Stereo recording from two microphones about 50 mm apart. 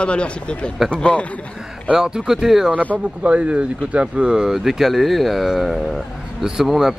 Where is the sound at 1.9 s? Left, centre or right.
Centre.